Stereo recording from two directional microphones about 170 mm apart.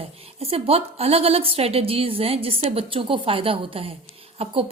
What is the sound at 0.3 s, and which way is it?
Speech, 35° right (ahead or behind).